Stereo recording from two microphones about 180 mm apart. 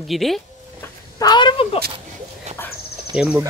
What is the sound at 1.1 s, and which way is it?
Speech, 25° left (ahead or behind).